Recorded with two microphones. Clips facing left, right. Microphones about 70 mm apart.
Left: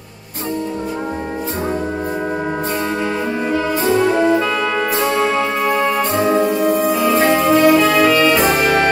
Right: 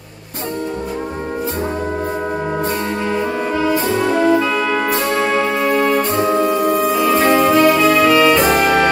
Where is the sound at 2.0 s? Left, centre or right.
Centre.